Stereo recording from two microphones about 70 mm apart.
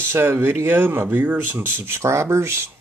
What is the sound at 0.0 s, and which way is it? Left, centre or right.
Speech, right.